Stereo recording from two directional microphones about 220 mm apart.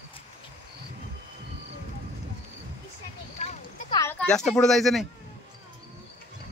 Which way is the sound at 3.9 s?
10° left (ahead or behind).